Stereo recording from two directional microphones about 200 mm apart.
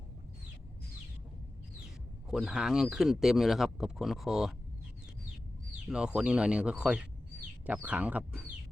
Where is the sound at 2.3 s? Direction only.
Centre (ahead or behind).